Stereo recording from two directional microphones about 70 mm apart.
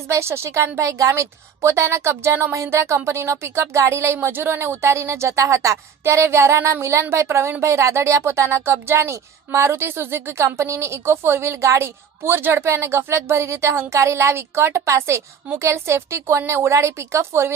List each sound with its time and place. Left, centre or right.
0.1 s speech: right